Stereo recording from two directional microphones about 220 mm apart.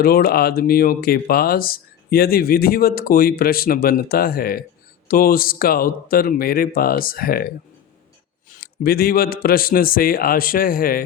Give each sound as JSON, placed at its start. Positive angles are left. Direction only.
{"t": 0.0, "sound": "speech", "side_deg": 45}
{"t": 8.6, "sound": "speech", "side_deg": 45}